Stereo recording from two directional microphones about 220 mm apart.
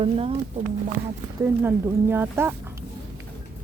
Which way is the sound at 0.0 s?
25° right (ahead or behind).